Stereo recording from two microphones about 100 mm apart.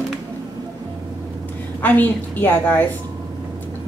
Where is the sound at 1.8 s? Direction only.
20° left (ahead or behind).